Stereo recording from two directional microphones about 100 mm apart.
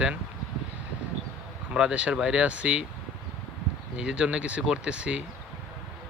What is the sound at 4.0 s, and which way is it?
Speech, 10° right (ahead or behind).